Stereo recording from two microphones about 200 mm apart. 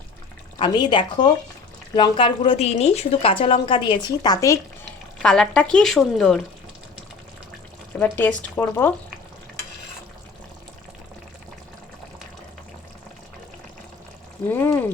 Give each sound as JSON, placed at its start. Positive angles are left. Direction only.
{"t": 0.6, "sound": "a woman's voice", "side_deg": 25}
{"t": 5.2, "sound": "speech", "side_deg": 5}
{"t": 7.9, "sound": "speech", "side_deg": 10}
{"t": 14.5, "sound": "speech", "side_deg": 10}